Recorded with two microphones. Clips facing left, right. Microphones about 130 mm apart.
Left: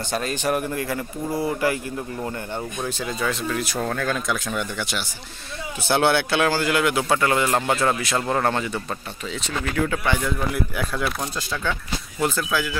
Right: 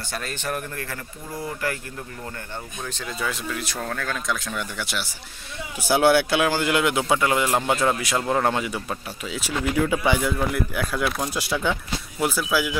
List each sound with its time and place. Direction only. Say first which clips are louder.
0.1 s a man's voice: left 6 dB; 20° left (ahead or behind)
2.9 s a man's voice: left 5 dB; 10° left (ahead or behind)
3.2 s a man's voice: left 3 dB; 5° right (ahead or behind)
10.5 s a man's voice: even; centre (ahead or behind)